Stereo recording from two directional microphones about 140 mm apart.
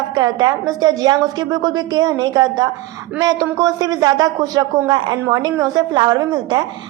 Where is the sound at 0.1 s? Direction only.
30° right (ahead or behind).